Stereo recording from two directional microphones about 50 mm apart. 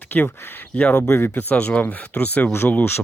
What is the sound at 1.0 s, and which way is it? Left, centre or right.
Speech, left.